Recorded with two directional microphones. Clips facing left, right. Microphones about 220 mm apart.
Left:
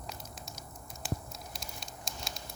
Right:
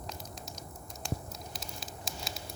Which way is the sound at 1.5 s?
Centre (ahead or behind).